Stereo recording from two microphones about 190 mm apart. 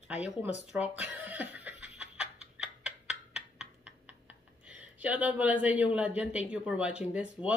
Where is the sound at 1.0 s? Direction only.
10° right (ahead or behind).